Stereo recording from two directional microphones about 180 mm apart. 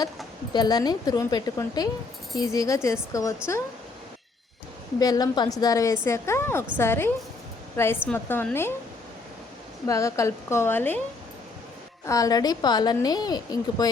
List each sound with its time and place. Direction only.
0.5 s a woman's voice: 20° left (ahead or behind)
4.9 s a woman's voice: 20° left (ahead or behind)
9.8 s a woman's voice: 15° left (ahead or behind)
12.0 s a woman's voice: 20° left (ahead or behind)